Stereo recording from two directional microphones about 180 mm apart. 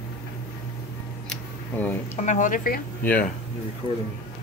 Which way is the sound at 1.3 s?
10° left (ahead or behind).